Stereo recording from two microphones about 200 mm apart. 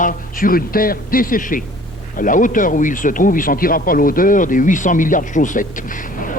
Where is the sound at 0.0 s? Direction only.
45° left (ahead or behind).